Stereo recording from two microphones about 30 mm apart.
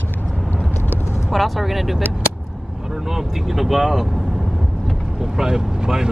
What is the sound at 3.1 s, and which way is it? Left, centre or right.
Speech, centre.